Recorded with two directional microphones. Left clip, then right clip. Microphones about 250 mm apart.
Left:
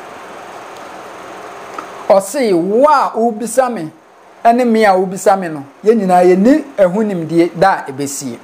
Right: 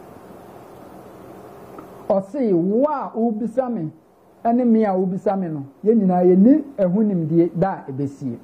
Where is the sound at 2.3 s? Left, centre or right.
Centre.